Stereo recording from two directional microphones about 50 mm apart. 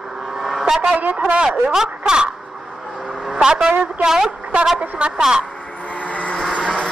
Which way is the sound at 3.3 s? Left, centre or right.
Centre.